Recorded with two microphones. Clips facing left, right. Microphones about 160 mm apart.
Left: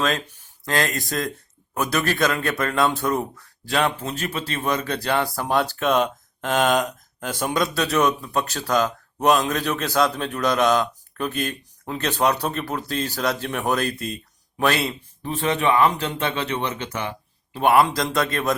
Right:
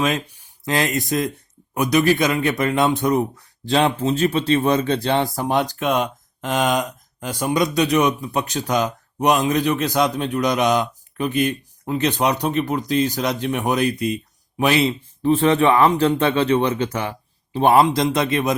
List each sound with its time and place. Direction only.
0.0 s speech: 15° right (ahead or behind)
5.8 s a man's voice: 5° right (ahead or behind)
7.8 s a man's voice: 15° right (ahead or behind)